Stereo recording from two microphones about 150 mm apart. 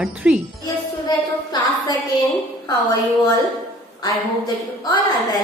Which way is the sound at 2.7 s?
30° left (ahead or behind).